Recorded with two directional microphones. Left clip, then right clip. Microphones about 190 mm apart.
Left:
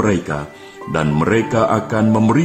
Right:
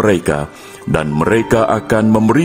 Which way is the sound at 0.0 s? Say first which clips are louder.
Right 5 dB; 50° right (ahead or behind).